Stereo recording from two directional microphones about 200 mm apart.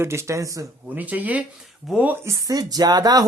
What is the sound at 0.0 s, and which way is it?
Speech, 15° right (ahead or behind).